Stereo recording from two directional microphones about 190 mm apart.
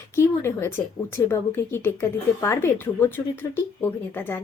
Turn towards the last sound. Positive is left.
turn(degrees=10)  # may be behind; listen again after turning